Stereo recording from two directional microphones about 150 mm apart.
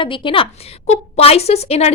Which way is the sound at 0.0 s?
35° left (ahead or behind).